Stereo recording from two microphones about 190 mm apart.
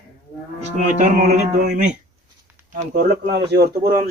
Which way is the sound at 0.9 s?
40° right (ahead or behind).